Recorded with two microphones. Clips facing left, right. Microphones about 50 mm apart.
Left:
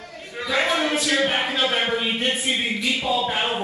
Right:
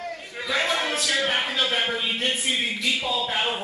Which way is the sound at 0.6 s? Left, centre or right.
Centre.